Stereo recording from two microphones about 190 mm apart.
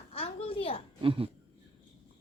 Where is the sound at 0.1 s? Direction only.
30° left (ahead or behind).